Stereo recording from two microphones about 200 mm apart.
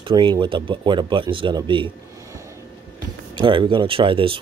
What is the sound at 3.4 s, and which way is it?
Speech, 25° right (ahead or behind).